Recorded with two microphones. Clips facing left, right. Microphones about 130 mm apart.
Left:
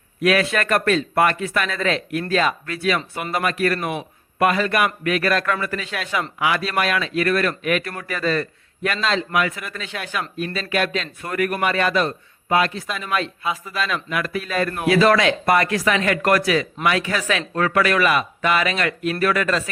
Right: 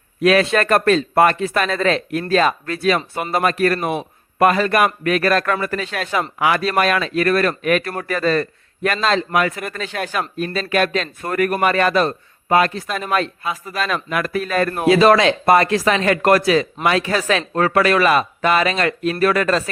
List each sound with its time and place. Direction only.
0.2 s a man's voice: 30° right (ahead or behind)
14.8 s a man's voice: 25° right (ahead or behind)